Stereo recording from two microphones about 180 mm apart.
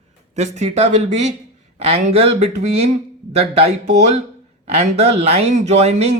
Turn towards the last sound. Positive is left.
turn(degrees=-35)  # may be behind; listen again after turning